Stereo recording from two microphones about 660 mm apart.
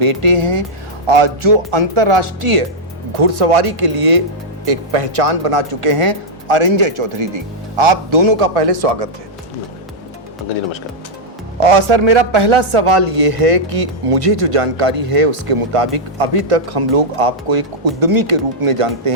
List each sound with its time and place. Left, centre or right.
0.0 s a man's voice: right
11.6 s a man's voice: right